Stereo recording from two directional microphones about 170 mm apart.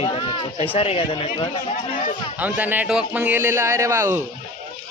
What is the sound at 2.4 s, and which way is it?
Speech, 10° right (ahead or behind).